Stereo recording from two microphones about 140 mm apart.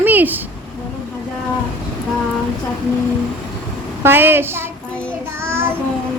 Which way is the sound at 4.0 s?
15° right (ahead or behind).